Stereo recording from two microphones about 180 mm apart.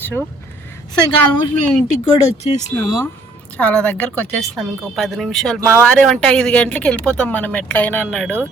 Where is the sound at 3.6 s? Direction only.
5° left (ahead or behind).